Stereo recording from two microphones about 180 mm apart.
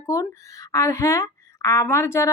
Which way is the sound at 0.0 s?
15° left (ahead or behind).